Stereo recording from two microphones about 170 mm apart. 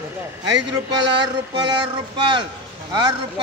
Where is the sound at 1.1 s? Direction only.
25° right (ahead or behind).